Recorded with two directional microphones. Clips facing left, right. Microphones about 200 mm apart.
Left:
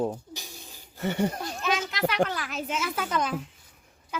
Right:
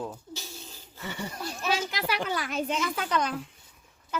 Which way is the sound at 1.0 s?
55° left (ahead or behind).